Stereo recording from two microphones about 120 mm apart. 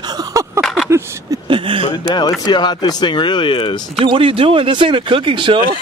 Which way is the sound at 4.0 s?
45° right (ahead or behind).